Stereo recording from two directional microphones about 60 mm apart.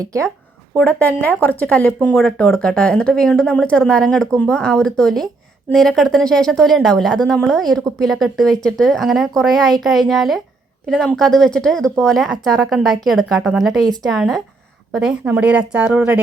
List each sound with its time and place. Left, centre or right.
0.0 s speech: right
0.8 s speech: left
1.7 s speech: centre
2.1 s speech: centre
2.5 s a woman's voice: centre; by 16.2 s right